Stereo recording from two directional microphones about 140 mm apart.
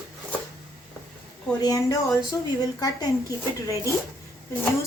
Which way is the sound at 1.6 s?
25° left (ahead or behind).